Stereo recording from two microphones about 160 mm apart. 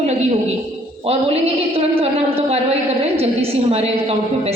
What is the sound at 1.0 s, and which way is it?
A man's voice, 40° right (ahead or behind).